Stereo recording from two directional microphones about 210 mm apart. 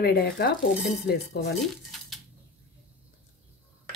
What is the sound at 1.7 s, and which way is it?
Dishes, centre (ahead or behind).